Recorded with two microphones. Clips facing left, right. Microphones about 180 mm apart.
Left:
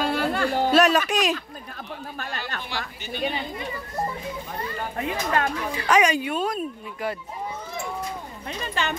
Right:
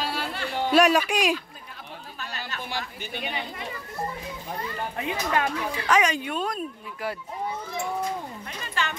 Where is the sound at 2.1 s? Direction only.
55° left (ahead or behind).